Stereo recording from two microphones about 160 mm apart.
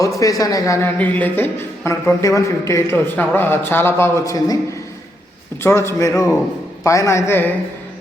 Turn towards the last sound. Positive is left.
turn(degrees=15)  # may be behind; listen again after turning